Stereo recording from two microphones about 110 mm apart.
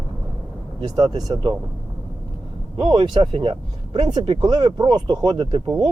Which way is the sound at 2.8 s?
40° right (ahead or behind).